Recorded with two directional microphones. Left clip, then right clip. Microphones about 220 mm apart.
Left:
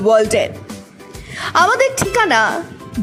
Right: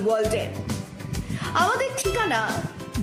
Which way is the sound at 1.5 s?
35° left (ahead or behind).